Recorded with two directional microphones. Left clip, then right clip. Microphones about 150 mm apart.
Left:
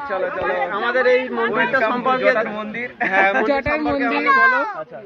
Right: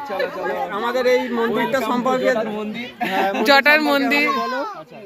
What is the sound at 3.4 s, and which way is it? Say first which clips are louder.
Speech: right 6 dB; 10° right (ahead or behind).